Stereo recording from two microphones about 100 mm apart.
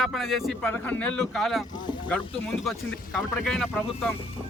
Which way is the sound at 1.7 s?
50° left (ahead or behind).